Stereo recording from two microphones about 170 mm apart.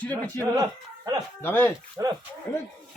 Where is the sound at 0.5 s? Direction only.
20° right (ahead or behind).